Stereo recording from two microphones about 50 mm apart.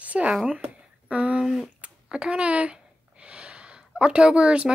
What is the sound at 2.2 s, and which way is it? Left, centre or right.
Speech, right.